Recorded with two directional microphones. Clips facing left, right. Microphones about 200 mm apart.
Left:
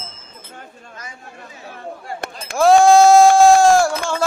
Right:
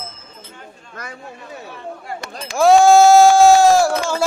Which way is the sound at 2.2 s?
55° left (ahead or behind).